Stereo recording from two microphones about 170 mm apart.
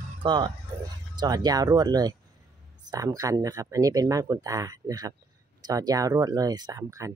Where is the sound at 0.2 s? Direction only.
30° right (ahead or behind).